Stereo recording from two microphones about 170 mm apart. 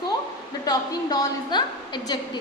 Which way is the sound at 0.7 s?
25° left (ahead or behind).